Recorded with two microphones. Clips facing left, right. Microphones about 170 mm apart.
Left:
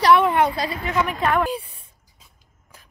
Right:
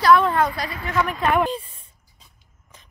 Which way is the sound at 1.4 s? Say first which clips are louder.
Right 1 dB; 10° left (ahead or behind).